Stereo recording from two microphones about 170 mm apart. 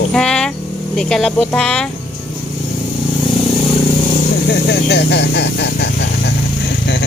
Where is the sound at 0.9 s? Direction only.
5° left (ahead or behind).